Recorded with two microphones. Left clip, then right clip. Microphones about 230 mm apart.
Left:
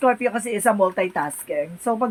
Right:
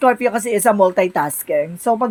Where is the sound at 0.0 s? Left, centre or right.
Right.